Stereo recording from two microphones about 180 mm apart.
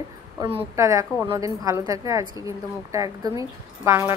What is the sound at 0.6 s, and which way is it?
A woman's voice, 15° right (ahead or behind).